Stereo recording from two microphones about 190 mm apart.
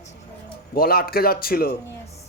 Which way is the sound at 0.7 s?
55° left (ahead or behind).